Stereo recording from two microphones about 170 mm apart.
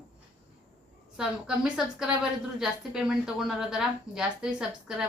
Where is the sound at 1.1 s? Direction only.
5° right (ahead or behind).